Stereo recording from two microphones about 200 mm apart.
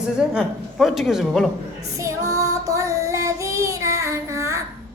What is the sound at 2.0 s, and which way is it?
Child singing, 15° right (ahead or behind).